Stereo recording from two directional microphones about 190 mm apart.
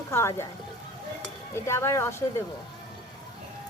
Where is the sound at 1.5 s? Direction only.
15° left (ahead or behind).